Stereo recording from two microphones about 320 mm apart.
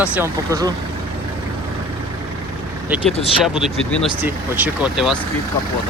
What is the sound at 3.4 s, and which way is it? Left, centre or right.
Speech, centre.